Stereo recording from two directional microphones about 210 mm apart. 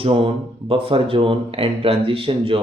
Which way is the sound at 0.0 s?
25° right (ahead or behind).